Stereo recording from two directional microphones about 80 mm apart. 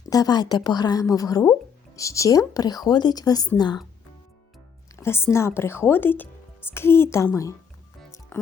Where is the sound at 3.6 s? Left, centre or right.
Left.